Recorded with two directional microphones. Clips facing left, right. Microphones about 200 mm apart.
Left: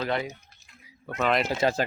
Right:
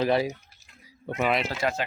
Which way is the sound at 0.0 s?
30° right (ahead or behind).